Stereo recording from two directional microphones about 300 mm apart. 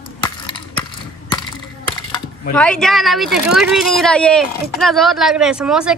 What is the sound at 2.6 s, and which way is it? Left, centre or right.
Speech, centre.